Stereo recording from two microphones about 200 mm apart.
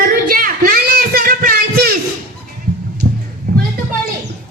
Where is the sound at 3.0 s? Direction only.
50° right (ahead or behind).